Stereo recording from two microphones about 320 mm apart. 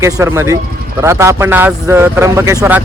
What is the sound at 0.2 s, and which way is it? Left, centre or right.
Speech, centre.